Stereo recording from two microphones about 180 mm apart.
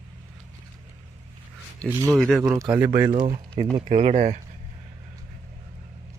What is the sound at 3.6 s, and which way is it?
Speech, 30° right (ahead or behind).